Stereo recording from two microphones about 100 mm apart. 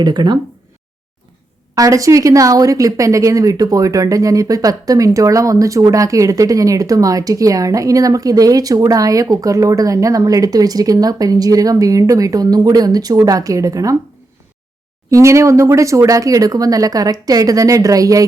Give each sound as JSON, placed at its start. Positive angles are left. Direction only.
{"t": 0.0, "sound": "speech", "side_deg": -45}
{"t": 1.7, "sound": "speech", "side_deg": -35}
{"t": 15.1, "sound": "speech", "side_deg": -30}